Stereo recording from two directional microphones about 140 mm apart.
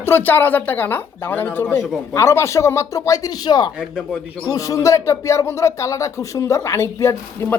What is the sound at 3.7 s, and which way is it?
Speech, 5° right (ahead or behind).